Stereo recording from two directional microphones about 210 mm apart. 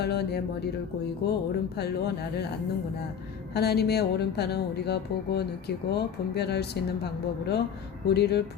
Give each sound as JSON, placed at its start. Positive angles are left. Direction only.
{"t": 0.0, "sound": "speech", "side_deg": 50}
{"t": 3.5, "sound": "speech", "side_deg": 50}